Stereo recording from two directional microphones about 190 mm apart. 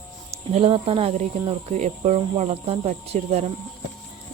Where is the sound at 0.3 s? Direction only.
30° right (ahead or behind).